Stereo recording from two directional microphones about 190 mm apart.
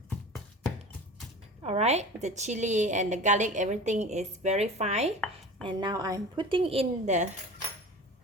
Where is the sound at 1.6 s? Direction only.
35° right (ahead or behind).